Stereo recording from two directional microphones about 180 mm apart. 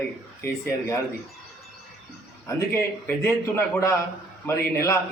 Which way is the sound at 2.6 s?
15° left (ahead or behind).